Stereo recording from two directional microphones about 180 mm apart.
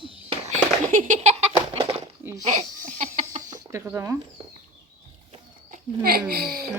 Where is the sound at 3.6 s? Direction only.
15° right (ahead or behind).